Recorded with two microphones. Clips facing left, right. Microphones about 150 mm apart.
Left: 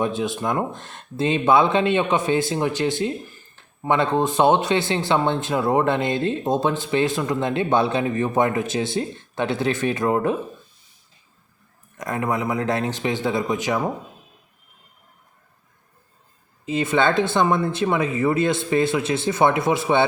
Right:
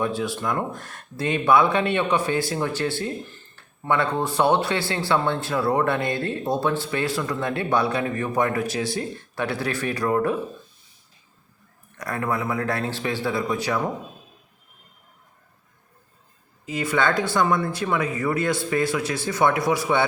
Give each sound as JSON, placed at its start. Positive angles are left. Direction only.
{"t": 0.0, "sound": "speech", "side_deg": 20}
{"t": 11.9, "sound": "speech", "side_deg": 20}
{"t": 16.6, "sound": "speech", "side_deg": 25}